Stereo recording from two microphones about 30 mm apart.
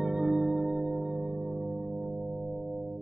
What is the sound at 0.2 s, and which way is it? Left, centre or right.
Music, centre.